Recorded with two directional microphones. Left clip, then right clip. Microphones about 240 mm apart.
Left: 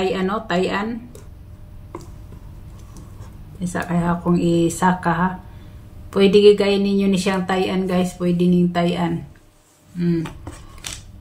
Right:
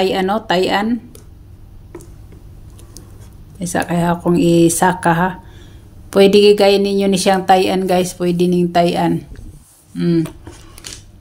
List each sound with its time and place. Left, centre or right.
0.0 s speech: right
3.5 s speech: right